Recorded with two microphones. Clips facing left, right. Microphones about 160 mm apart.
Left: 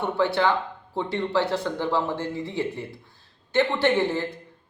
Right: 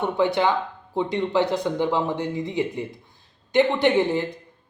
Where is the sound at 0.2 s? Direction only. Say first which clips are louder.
Right 1 dB; 15° right (ahead or behind).